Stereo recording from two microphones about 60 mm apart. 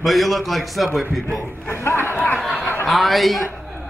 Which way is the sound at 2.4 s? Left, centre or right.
Centre.